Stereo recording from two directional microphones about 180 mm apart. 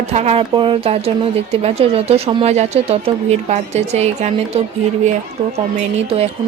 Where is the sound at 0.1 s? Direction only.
35° right (ahead or behind).